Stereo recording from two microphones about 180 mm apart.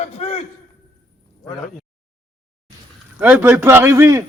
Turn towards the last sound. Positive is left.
turn(degrees=-15)  # may be behind; listen again after turning